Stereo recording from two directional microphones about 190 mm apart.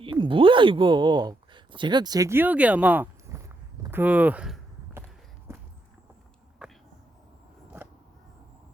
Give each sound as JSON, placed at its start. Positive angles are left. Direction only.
{"t": 0.0, "sound": "speech", "side_deg": -25}
{"t": 3.9, "sound": "walk", "side_deg": -10}
{"t": 6.6, "sound": "a sound", "side_deg": -5}